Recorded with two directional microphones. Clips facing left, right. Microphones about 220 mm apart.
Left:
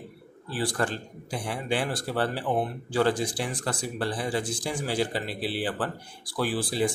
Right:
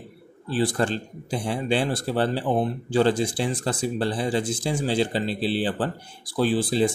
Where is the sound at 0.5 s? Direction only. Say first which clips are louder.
Right 5 dB; 25° right (ahead or behind).